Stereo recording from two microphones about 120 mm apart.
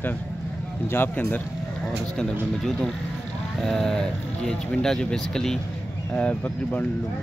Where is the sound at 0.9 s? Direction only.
15° left (ahead or behind).